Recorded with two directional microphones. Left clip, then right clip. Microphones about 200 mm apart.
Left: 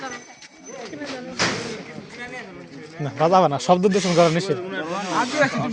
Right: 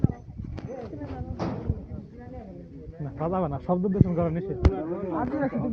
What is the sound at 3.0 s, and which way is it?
Speech, 50° left (ahead or behind).